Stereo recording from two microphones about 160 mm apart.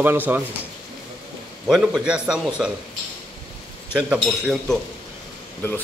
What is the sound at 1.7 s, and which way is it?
Speech, 5° right (ahead or behind).